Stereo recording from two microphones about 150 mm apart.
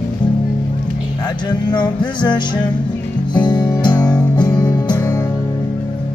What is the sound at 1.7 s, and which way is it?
Music, 30° left (ahead or behind).